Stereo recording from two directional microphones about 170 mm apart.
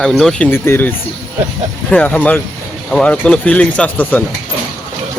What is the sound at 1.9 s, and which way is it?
Speech, 10° left (ahead or behind).